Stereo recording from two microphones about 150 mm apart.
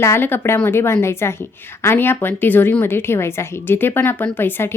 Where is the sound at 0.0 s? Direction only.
15° left (ahead or behind).